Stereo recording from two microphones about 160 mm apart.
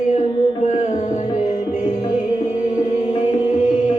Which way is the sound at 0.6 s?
45° left (ahead or behind).